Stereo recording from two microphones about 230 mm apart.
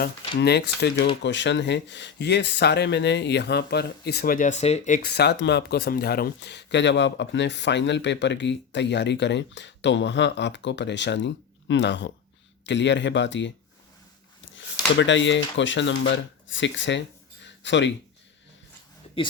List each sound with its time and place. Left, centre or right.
0.0 s speech: left
5.0 s speech: left
14.5 s speech: left
17.4 s a sound: left